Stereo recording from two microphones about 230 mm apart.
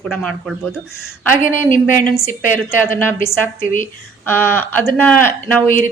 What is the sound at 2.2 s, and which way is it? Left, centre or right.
A woman's voice, centre.